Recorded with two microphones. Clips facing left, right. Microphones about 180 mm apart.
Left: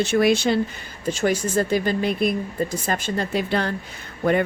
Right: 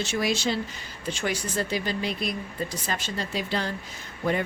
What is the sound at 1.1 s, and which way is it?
Speech, 45° left (ahead or behind).